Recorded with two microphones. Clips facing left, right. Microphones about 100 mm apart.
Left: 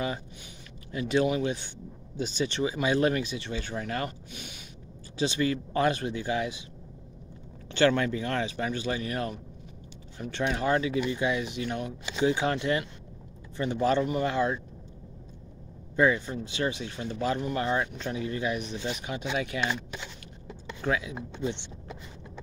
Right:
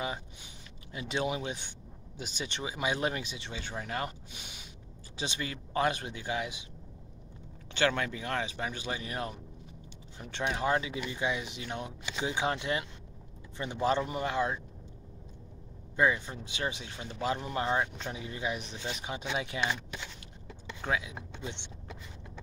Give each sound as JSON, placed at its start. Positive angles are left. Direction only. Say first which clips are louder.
{"t": 0.9, "sound": "speech", "louder": "left 7 dB", "side_deg": -20}
{"t": 7.7, "sound": "speech", "louder": "left 6 dB", "side_deg": -10}
{"t": 16.0, "sound": "speech", "louder": "left 4 dB", "side_deg": -10}
{"t": 20.8, "sound": "speech", "louder": "left 4 dB", "side_deg": -10}